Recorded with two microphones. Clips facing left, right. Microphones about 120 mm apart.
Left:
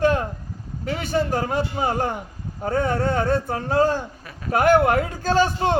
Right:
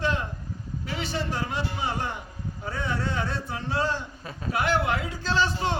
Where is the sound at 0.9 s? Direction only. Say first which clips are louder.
Left 8 dB; 50° left (ahead or behind).